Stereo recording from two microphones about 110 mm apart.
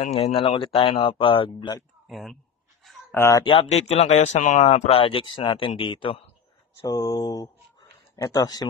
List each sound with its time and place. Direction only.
0.2 s speech: 50° left (ahead or behind)
2.0 s speech: centre (ahead or behind)
2.8 s a sound: centre (ahead or behind)
3.2 s speech: 25° left (ahead or behind)
3.6 s speech: 85° left; by 6.2 s 55° left (ahead or behind)
6.8 s speech: 35° left (ahead or behind)